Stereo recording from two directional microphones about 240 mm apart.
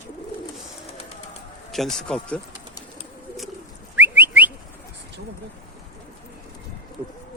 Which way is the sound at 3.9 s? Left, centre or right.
Centre.